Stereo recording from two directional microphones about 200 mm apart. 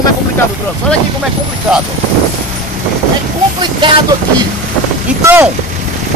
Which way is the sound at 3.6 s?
25° right (ahead or behind).